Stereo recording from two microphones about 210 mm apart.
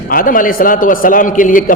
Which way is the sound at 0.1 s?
40° left (ahead or behind).